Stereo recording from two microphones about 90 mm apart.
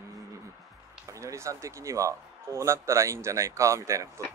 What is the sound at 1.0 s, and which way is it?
Speech, 35° right (ahead or behind).